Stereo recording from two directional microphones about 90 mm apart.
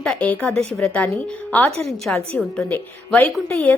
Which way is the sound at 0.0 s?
10° left (ahead or behind).